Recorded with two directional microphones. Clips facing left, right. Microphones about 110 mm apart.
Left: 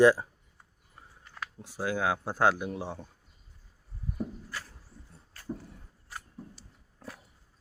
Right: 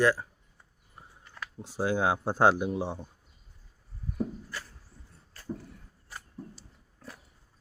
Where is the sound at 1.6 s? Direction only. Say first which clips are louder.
Right 3 dB; 25° right (ahead or behind).